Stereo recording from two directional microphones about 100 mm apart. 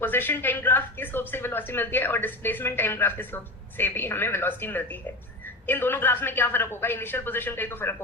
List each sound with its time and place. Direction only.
0.0 s speech: 20° left (ahead or behind)